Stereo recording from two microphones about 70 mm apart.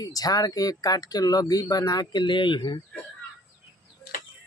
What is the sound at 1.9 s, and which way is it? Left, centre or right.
Speech, left.